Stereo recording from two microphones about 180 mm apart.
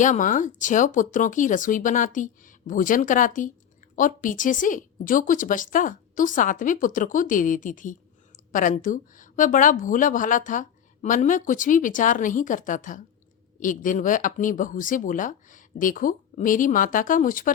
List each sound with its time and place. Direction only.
0.0 s a woman's voice: 45° left (ahead or behind)